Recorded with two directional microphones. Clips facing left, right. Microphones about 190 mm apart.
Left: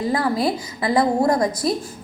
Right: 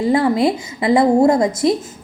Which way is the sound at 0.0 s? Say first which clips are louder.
Right 6 dB; 25° right (ahead or behind).